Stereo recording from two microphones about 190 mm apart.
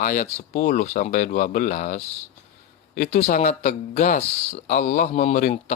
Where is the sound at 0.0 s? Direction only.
40° left (ahead or behind).